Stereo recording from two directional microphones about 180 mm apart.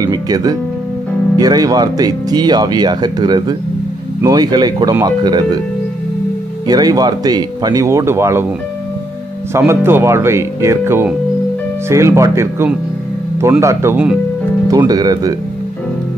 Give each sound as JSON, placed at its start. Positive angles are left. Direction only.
{"t": 0.0, "sound": "speech", "side_deg": -20}
{"t": 6.7, "sound": "speech", "side_deg": -20}
{"t": 9.5, "sound": "speech", "side_deg": -15}
{"t": 14.7, "sound": "speech", "side_deg": -20}